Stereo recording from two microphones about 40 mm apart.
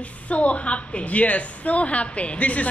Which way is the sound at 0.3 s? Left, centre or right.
Left.